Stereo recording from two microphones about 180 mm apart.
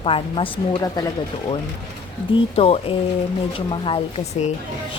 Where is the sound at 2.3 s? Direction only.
35° left (ahead or behind).